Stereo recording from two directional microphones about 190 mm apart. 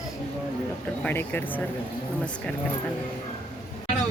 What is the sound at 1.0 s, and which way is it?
Speech, 10° left (ahead or behind).